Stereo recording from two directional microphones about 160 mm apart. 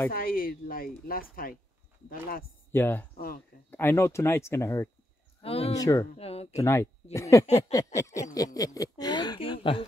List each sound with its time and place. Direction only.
0.1 s speech: 65° left (ahead or behind)
2.7 s speech: 15° left (ahead or behind)
5.4 s speech: 40° left (ahead or behind)
5.8 s speech: 20° left (ahead or behind)
6.1 s speech: 40° left (ahead or behind)
6.5 s speech: 15° left (ahead or behind)
7.4 s a sound: 45° left (ahead or behind)
7.7 s speech: 20° left (ahead or behind)